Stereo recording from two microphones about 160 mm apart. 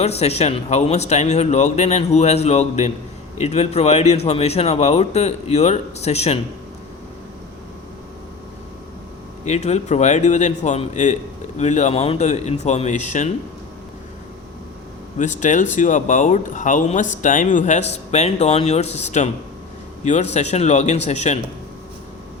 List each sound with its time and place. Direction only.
0.0 s speech: 40° left (ahead or behind)
9.4 s speech: 45° left (ahead or behind)
15.2 s speech: 50° left (ahead or behind)
20.3 s speech: 45° left (ahead or behind)